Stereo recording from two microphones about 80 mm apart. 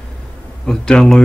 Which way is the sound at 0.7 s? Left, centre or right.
Centre.